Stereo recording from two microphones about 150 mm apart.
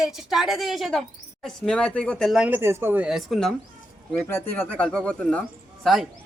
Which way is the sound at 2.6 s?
15° right (ahead or behind).